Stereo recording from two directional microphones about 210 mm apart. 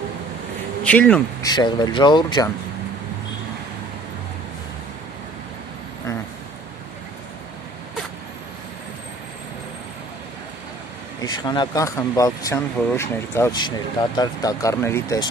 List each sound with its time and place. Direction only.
0.8 s speech: 5° left (ahead or behind)
1.4 s speech: 20° left (ahead or behind)
11.2 s speech: 20° left (ahead or behind)